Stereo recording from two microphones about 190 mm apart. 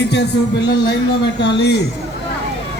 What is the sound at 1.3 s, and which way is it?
Speech, 60° left (ahead or behind).